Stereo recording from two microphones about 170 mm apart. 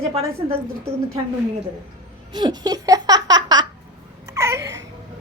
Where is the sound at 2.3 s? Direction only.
25° right (ahead or behind).